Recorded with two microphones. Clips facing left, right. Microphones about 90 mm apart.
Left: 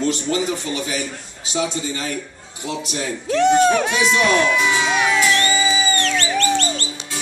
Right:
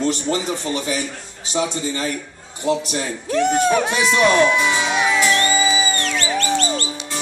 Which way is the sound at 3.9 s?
35° right (ahead or behind).